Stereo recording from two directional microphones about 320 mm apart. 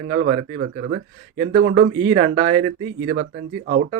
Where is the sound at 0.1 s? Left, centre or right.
Right.